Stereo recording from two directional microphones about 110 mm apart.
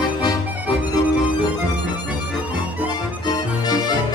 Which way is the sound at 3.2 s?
40° left (ahead or behind).